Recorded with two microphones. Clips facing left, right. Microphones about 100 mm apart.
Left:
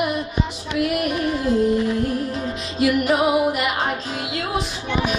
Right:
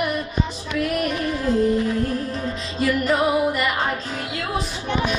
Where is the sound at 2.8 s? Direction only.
20° left (ahead or behind).